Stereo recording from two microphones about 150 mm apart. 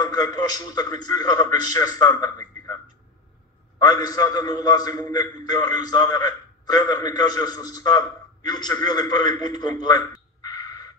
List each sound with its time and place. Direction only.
0.0 s a man's voice: 25° left (ahead or behind)
3.8 s a man's voice: 25° left (ahead or behind)
9.5 s a sound: 25° left (ahead or behind)